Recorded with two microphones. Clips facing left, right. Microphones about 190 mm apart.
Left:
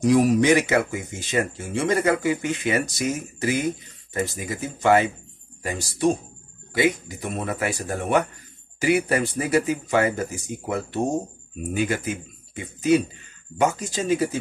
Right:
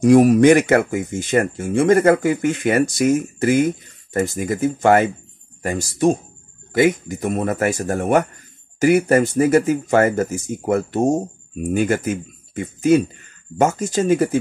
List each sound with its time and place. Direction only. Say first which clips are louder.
0.0 s speech: right 7 dB; 50° right (ahead or behind)